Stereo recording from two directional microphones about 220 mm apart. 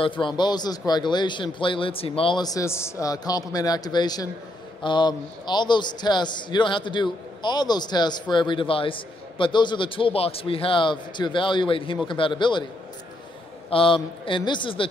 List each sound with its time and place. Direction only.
0.0 s a man's voice: 20° left (ahead or behind)
13.7 s a man's voice: 25° left (ahead or behind)